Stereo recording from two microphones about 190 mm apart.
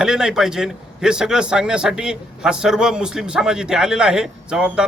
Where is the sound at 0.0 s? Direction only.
5° right (ahead or behind).